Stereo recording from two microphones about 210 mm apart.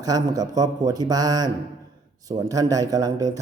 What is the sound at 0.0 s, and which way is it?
A man's voice, 15° right (ahead or behind).